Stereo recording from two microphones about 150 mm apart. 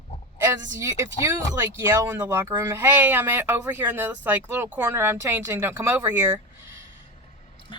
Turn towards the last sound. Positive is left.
turn(degrees=-15)  # may be behind; listen again after turning